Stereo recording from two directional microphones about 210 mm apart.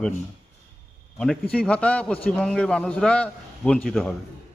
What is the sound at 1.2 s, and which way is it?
A man's voice, 5° left (ahead or behind).